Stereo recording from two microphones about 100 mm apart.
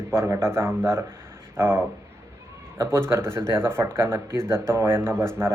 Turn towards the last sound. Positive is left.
turn(degrees=-25)  # may be behind; listen again after turning